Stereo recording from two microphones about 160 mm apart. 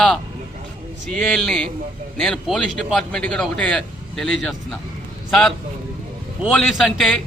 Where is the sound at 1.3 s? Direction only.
5° left (ahead or behind).